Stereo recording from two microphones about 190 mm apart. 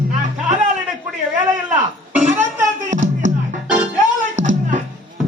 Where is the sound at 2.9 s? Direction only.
40° right (ahead or behind).